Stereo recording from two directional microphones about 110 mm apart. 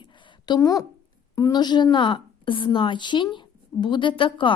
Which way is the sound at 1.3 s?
35° left (ahead or behind).